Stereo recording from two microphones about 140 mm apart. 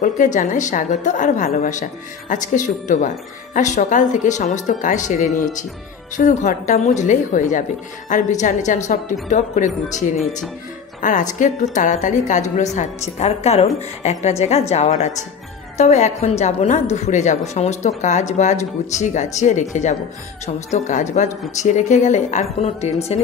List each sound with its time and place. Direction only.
0.0 s a woman's voice: 65° left (ahead or behind); by 23.2 s 50° left (ahead or behind)